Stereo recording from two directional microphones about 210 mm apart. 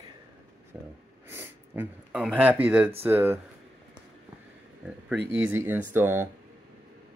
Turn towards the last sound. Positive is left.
turn(degrees=-10)  # may be behind; listen again after turning